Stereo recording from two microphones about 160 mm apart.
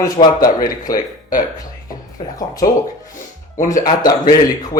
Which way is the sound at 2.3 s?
25° left (ahead or behind).